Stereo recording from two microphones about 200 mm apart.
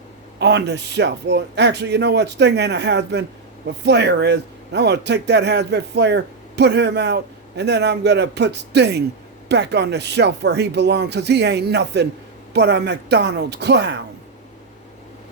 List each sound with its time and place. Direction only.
0.3 s speech: 60° right (ahead or behind)